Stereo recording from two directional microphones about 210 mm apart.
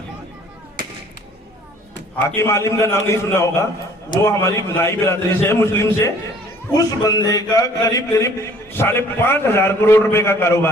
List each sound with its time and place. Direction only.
2.2 s a man's voice: 15° left (ahead or behind)